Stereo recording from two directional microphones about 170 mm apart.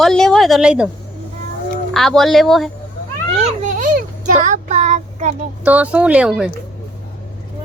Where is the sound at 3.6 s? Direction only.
50° right (ahead or behind).